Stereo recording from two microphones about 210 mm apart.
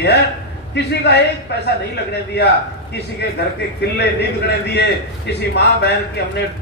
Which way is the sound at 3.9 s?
50° left (ahead or behind).